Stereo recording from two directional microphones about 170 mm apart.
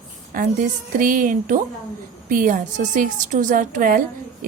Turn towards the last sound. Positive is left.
turn(degrees=-55)  # may be behind; listen again after turning